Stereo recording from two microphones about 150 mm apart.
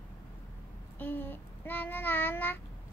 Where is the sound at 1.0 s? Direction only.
15° left (ahead or behind).